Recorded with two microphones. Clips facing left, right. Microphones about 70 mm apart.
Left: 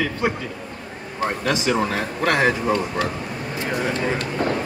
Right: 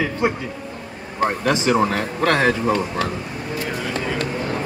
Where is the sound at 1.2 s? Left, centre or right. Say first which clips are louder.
Right 3 dB; right.